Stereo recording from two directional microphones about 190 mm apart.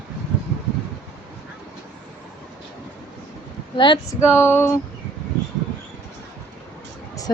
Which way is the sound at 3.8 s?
25° left (ahead or behind).